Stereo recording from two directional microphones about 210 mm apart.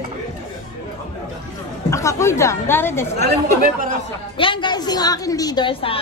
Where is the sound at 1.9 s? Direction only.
15° left (ahead or behind).